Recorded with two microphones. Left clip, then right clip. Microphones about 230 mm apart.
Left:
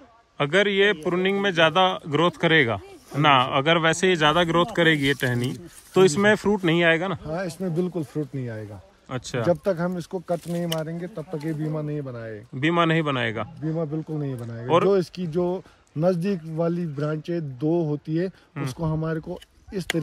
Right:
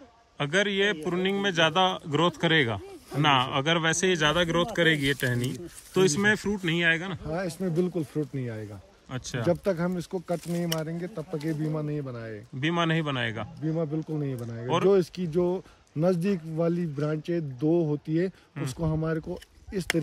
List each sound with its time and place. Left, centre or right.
0.4 s a man's voice: centre
7.2 s speech: left
9.1 s a man's voice: centre
9.5 s speech: centre
11.4 s speech: centre
12.5 s a man's voice: centre
13.7 s speech: centre